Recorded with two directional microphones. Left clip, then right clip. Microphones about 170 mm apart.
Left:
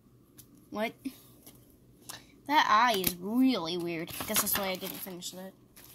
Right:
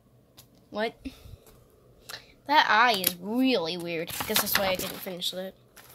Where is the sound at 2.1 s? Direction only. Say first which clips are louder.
Right 5 dB; 5° right (ahead or behind).